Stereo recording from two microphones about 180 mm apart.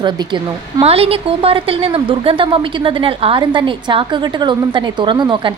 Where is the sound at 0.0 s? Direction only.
25° right (ahead or behind).